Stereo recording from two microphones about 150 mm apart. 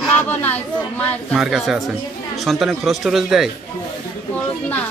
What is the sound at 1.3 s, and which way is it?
A man's voice, centre (ahead or behind).